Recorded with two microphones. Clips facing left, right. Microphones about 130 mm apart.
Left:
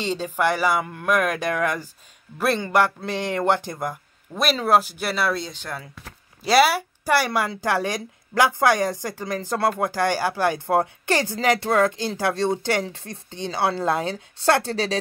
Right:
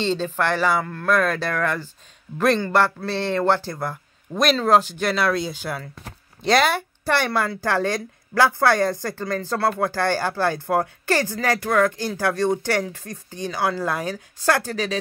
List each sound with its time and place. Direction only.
0.0 s speech: 10° left (ahead or behind); by 5.8 s 5° right (ahead or behind)
6.4 s a woman's voice: 5° left (ahead or behind); by 15.0 s 30° left (ahead or behind)